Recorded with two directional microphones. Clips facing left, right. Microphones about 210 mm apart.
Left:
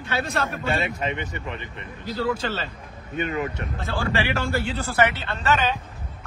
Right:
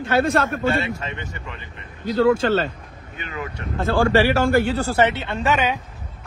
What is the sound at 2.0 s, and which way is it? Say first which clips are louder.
Speech: right 9 dB; 50° right (ahead or behind).